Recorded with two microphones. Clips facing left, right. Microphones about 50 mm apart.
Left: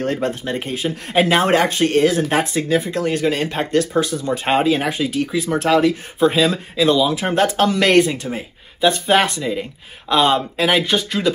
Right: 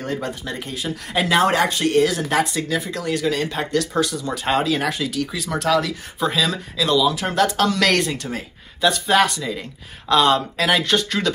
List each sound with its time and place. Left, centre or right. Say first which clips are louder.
0.0 s speech: left 5 dB; left; by 11.3 s centre